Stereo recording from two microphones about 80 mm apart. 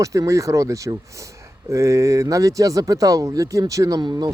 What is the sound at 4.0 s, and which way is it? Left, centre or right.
Speech, right.